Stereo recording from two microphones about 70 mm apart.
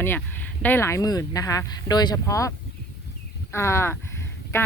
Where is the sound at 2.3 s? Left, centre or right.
Left.